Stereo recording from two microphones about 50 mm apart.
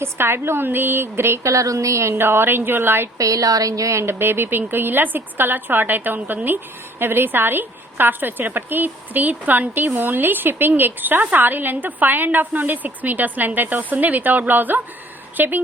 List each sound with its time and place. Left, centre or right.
0.0 s a woman's voice: right
3.2 s a woman's voice: right